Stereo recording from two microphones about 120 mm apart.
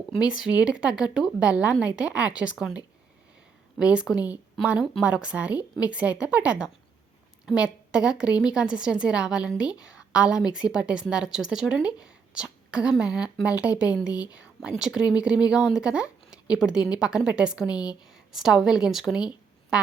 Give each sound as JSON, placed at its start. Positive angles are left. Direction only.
{"t": 0.2, "sound": "a woman's voice", "side_deg": -10}
{"t": 17.7, "sound": "a woman's voice", "side_deg": 30}
{"t": 18.1, "sound": "a woman's voice", "side_deg": 0}